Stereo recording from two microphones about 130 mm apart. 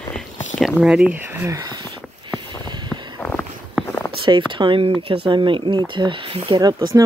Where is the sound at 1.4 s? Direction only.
30° right (ahead or behind).